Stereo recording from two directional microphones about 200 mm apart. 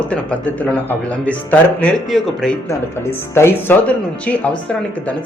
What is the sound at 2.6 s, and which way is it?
Speech, 15° left (ahead or behind).